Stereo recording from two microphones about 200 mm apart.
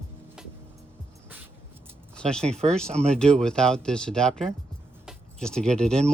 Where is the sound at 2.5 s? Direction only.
35° right (ahead or behind).